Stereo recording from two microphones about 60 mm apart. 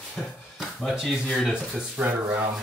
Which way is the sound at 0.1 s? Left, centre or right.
Centre.